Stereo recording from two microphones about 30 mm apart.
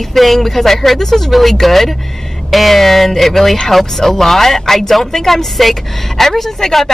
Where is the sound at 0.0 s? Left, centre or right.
Centre.